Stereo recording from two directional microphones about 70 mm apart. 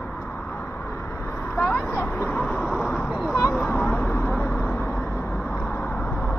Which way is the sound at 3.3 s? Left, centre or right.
Left.